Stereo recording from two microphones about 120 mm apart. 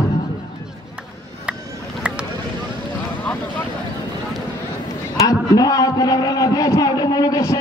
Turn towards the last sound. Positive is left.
turn(degrees=30)  # may be behind; listen again after turning